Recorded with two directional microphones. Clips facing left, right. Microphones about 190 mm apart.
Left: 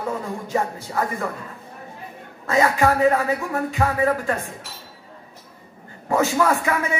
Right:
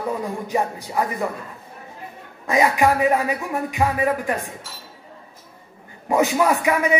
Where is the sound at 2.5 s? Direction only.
15° right (ahead or behind).